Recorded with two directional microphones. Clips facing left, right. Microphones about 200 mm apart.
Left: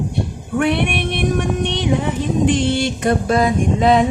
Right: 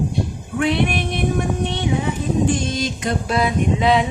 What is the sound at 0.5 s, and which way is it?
Female singing, 60° left (ahead or behind).